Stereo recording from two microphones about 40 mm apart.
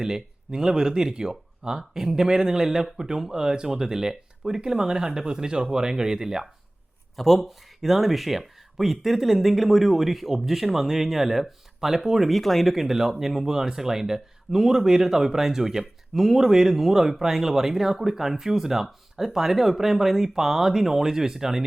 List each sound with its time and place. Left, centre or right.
0.0 s speech: centre
7.2 s speech: centre
12.3 s speech: centre